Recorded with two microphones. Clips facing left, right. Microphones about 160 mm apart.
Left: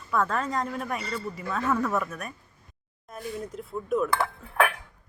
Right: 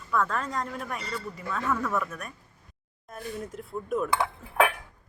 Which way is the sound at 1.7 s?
20° left (ahead or behind).